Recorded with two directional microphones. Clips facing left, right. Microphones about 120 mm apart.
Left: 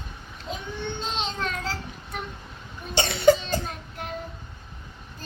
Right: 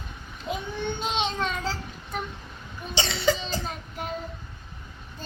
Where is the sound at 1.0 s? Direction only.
5° right (ahead or behind).